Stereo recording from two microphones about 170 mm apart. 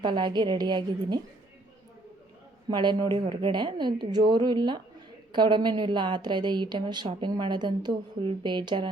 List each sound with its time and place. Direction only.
0.0 s a woman's voice: 25° right (ahead or behind)
2.6 s a woman's voice: 25° right (ahead or behind)